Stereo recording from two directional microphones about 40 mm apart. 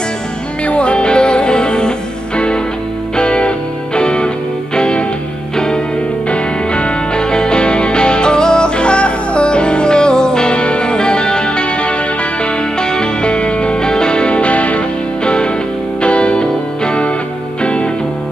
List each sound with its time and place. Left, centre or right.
0.7 s music: left
6.2 s music: left